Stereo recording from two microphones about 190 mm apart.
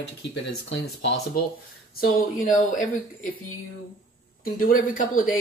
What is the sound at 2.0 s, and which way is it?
Speech, 45° left (ahead or behind).